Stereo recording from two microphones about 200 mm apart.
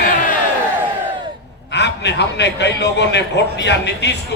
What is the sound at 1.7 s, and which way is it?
A man's voice, 60° left (ahead or behind).